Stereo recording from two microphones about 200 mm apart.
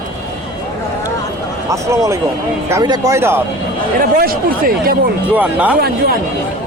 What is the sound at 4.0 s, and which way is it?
Speech, 45° right (ahead or behind).